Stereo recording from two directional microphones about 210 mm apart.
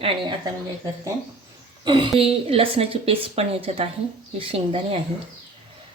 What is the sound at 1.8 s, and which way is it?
A woman's voice, 20° right (ahead or behind).